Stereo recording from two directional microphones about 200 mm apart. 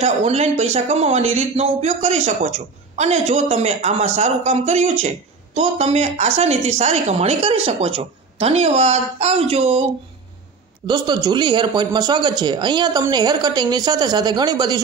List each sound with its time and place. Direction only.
0.0 s speech: 35° right (ahead or behind)
10.9 s speech: 20° right (ahead or behind)